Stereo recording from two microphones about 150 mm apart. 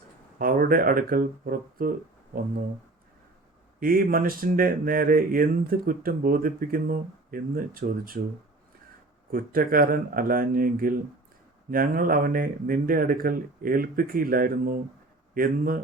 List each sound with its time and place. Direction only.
0.3 s speech: 75° right (ahead or behind)
3.8 s speech: 70° right (ahead or behind)
9.3 s speech: 75° right (ahead or behind)